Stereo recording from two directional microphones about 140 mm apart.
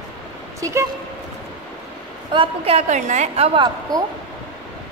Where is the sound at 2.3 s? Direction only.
40° right (ahead or behind).